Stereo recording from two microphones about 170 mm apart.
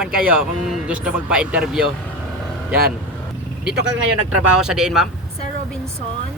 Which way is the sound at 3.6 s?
80° right.